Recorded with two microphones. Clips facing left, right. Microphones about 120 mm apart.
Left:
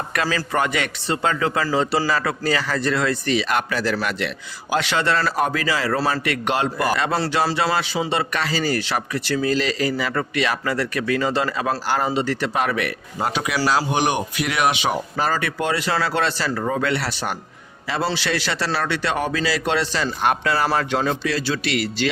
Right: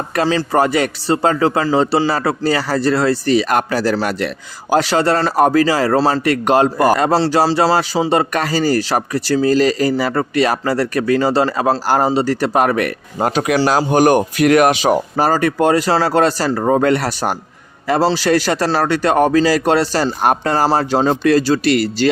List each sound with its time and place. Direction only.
0.1 s speech: 30° right (ahead or behind)
21.2 s speech: 45° right (ahead or behind)